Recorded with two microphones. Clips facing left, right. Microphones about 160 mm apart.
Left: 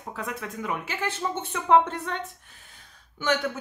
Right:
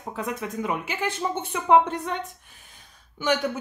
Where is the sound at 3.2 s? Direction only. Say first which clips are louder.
Right 2 dB; 15° right (ahead or behind).